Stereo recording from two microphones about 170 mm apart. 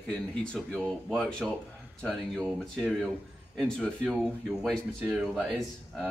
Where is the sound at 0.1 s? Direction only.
5° left (ahead or behind).